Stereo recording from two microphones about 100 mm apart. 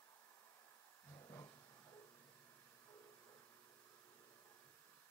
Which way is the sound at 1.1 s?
40° left (ahead or behind).